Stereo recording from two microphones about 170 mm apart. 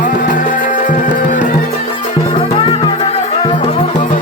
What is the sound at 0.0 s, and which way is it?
Music, 50° left (ahead or behind).